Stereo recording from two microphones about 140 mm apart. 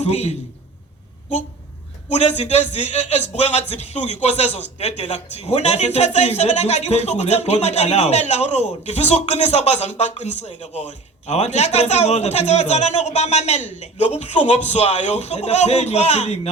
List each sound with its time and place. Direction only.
0.0 s a man's voice: 50° left (ahead or behind)
2.0 s a man's voice: 50° left (ahead or behind)